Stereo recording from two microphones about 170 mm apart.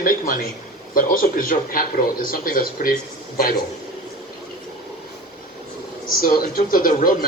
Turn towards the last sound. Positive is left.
turn(degrees=60)  # may be behind; listen again after turning